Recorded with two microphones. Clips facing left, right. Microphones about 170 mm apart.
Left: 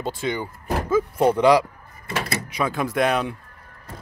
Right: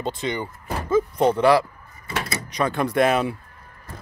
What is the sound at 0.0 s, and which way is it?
Speech, 5° left (ahead or behind).